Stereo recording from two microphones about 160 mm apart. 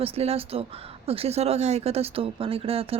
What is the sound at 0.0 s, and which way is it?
Speech, 40° right (ahead or behind).